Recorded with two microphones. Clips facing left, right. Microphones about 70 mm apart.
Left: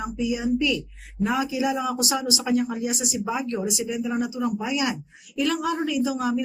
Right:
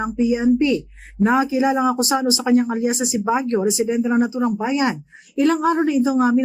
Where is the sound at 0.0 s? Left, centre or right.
Right.